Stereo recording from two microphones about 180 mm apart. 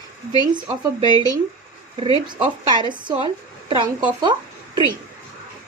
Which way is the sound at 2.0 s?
30° right (ahead or behind).